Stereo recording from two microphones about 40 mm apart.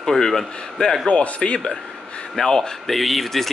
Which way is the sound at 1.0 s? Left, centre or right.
Left.